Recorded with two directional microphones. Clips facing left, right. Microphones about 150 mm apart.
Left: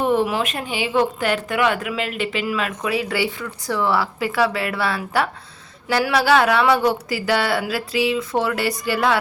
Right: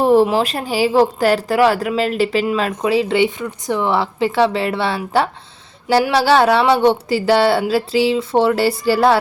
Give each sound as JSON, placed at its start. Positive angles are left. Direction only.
{"t": 0.0, "sound": "speech", "side_deg": -35}